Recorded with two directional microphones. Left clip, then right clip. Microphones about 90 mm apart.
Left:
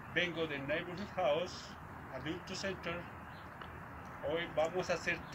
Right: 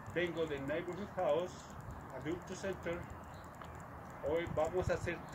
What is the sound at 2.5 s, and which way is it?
Speech, 30° right (ahead or behind).